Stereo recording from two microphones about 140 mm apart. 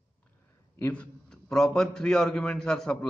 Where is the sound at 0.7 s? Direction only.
10° left (ahead or behind).